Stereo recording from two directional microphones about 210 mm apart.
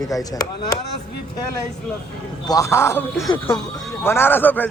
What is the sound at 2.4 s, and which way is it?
A man's voice, 15° left (ahead or behind).